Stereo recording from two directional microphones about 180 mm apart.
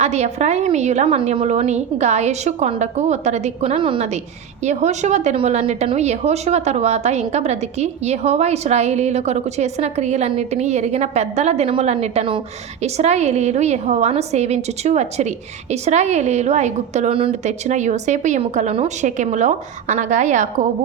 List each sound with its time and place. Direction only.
0.0 s a woman's voice: 40° right (ahead or behind)